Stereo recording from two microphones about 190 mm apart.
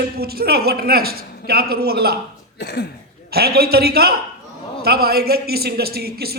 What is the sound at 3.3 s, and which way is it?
A man's voice, 55° right (ahead or behind).